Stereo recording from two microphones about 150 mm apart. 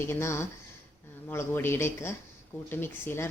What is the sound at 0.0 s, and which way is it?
Speech, 15° left (ahead or behind).